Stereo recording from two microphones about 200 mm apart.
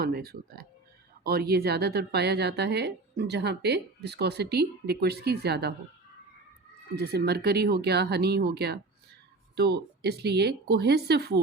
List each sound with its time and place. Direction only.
0.0 s a woman's voice: 50° right (ahead or behind)
6.9 s a woman's voice: 50° right (ahead or behind)